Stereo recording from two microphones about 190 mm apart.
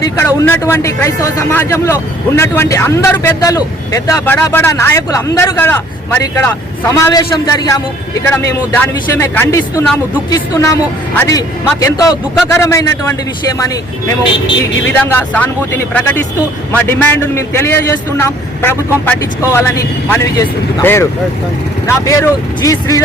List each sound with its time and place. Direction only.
0.0 s a man's voice: 10° left (ahead or behind)
15.0 s a man's voice: 10° left (ahead or behind)